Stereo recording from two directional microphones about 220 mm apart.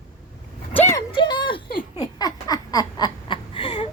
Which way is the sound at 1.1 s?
20° left (ahead or behind).